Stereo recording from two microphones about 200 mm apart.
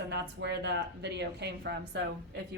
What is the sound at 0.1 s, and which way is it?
A woman's voice, 55° right (ahead or behind).